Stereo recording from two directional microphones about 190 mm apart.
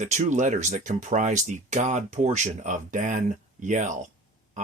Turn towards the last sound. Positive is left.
turn(degrees=-40)  # may be behind; listen again after turning